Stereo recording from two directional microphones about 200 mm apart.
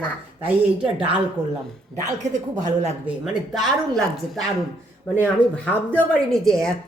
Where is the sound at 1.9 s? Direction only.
15° right (ahead or behind).